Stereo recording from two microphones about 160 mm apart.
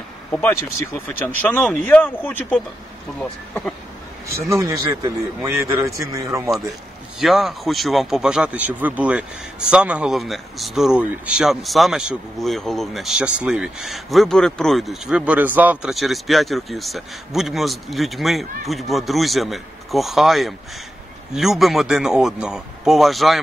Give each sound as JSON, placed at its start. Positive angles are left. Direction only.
{"t": 0.4, "sound": "speech", "side_deg": 10}
{"t": 4.5, "sound": "a man's voice", "side_deg": -20}
{"t": 7.2, "sound": "speech", "side_deg": 0}